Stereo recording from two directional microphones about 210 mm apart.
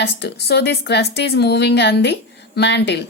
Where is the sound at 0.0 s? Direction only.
55° left (ahead or behind).